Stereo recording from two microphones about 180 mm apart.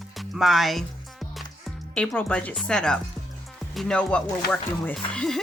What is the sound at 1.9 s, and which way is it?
Speech, 5° left (ahead or behind).